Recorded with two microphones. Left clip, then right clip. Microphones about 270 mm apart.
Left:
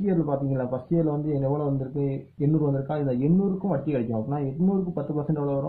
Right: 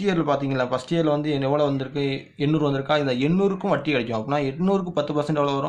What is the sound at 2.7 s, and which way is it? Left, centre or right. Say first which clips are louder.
A man's voice: right 6 dB; right.